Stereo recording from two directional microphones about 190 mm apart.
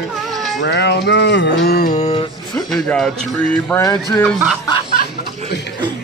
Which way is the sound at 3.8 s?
20° left (ahead or behind).